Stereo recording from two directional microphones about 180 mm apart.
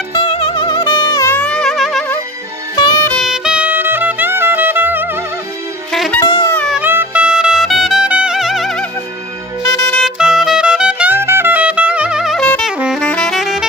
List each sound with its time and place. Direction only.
0.2 s music: 30° left (ahead or behind); by 2.0 s centre (ahead or behind)
3.2 s music: 5° right (ahead or behind)
5.9 s music: centre (ahead or behind)
6.1 s music: 20° left (ahead or behind)
6.5 s music: 5° left (ahead or behind)
6.8 s music: 10° right (ahead or behind)
9.9 s music: 5° right (ahead or behind)
12.7 s saxophone: 5° right (ahead or behind)